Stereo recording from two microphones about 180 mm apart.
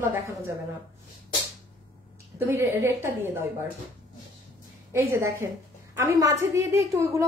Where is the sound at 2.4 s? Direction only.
15° right (ahead or behind).